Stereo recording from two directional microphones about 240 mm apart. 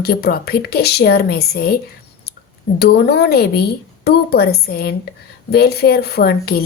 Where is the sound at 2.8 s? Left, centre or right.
Left.